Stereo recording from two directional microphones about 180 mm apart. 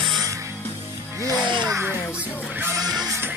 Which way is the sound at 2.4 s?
10° right (ahead or behind).